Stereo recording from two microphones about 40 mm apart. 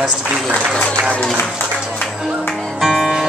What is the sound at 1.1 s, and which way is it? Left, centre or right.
Music, left.